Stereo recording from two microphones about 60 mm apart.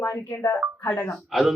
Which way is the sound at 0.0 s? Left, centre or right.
Left.